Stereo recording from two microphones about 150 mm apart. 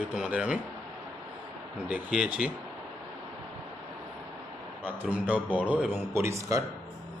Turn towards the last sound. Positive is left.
turn(degrees=-20)  # may be behind; listen again after turning